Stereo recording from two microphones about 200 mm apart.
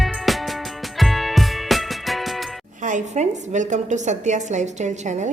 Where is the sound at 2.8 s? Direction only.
40° right (ahead or behind).